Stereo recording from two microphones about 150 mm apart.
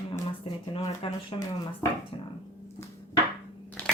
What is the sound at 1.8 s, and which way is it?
Speech, 15° left (ahead or behind).